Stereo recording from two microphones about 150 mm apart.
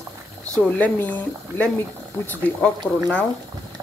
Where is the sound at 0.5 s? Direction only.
10° left (ahead or behind).